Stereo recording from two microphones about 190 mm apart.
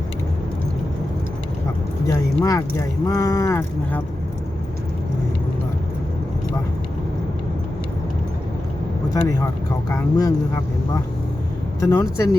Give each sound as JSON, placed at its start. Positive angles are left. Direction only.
{"t": 2.0, "sound": "speech", "side_deg": 15}
{"t": 9.0, "sound": "speech", "side_deg": 15}
{"t": 11.8, "sound": "speech", "side_deg": 15}